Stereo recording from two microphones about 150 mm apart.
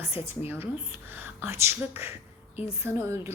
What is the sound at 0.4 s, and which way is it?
Speech, 15° right (ahead or behind).